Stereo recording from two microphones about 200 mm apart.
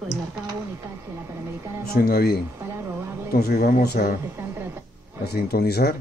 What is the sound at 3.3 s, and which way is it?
Speech, 50° left (ahead or behind).